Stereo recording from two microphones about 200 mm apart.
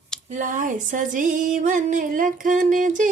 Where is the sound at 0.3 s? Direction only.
40° right (ahead or behind).